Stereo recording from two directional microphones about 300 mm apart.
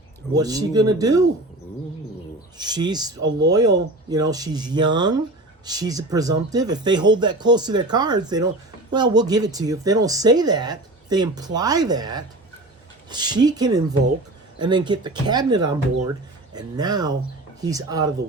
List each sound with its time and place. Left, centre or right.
0.3 s speech: centre
2.6 s speech: centre